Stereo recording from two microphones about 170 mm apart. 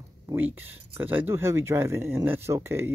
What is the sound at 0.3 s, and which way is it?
Speech, 10° right (ahead or behind).